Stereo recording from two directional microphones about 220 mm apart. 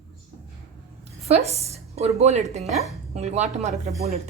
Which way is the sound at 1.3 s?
30° right (ahead or behind).